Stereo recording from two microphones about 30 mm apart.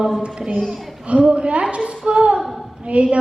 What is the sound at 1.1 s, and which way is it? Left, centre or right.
Speech, right.